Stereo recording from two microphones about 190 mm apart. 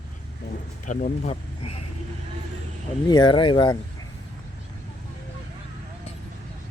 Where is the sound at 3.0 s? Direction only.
25° left (ahead or behind).